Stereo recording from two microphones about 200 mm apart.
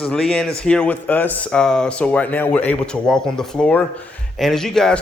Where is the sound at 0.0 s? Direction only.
5° left (ahead or behind).